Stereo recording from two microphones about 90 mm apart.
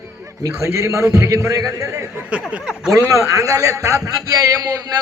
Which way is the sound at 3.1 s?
40° right (ahead or behind).